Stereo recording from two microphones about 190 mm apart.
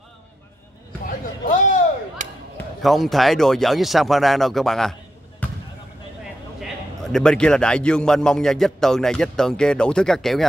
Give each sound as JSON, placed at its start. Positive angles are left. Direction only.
{"t": 1.0, "sound": "a sound", "side_deg": 40}
{"t": 2.8, "sound": "a man's voice", "side_deg": 0}
{"t": 5.4, "sound": "basketball bounce", "side_deg": 10}
{"t": 7.1, "sound": "a man's voice", "side_deg": 5}